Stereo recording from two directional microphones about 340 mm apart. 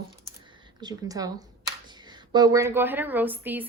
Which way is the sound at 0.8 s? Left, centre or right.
Centre.